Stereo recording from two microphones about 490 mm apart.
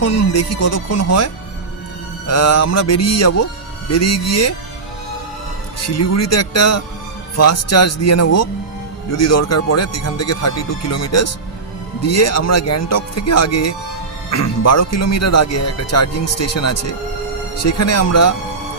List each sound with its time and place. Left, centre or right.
0.0 s speech: left
5.9 s speech: left